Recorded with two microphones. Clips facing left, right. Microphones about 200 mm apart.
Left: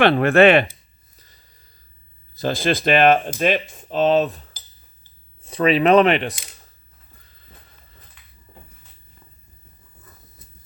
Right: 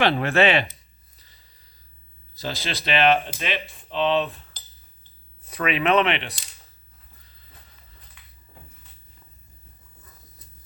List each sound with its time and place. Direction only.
0.0 s speech: 55° left (ahead or behind)
1.1 s a sound: 45° left (ahead or behind)
2.3 s speech: 50° left (ahead or behind)
5.4 s speech: 25° left (ahead or behind)